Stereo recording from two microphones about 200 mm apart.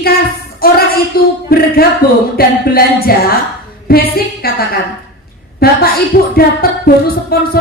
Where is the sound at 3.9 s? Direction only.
50° left (ahead or behind).